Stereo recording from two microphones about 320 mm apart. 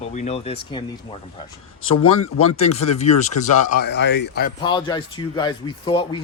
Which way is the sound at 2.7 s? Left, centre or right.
Centre.